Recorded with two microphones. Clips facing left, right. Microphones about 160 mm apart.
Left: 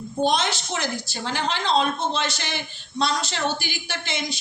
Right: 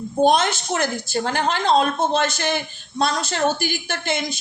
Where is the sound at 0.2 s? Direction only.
50° right (ahead or behind).